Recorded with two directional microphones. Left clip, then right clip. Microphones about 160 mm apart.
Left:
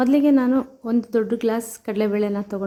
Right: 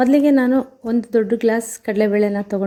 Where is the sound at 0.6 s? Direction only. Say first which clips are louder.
Right 2 dB; 5° right (ahead or behind).